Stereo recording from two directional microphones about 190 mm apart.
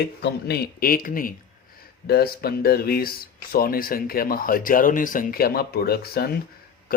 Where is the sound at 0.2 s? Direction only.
55° left (ahead or behind).